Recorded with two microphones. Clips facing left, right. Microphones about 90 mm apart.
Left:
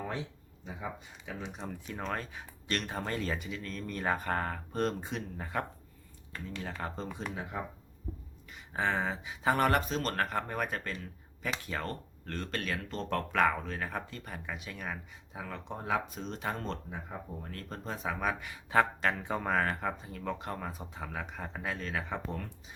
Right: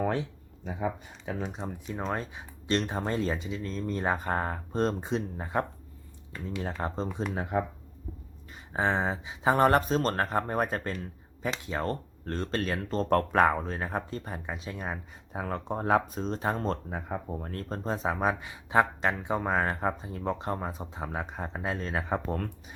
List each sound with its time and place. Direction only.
0.6 s speech: 60° right (ahead or behind)
1.2 s speech: 40° right (ahead or behind)
1.6 s speech: 20° right (ahead or behind)
7.5 s speech: 55° right (ahead or behind)
8.5 s speech: 30° right (ahead or behind)
15.3 s speech: 45° right (ahead or behind)
16.9 s speech: 55° right (ahead or behind)
17.5 s speech: 35° right (ahead or behind)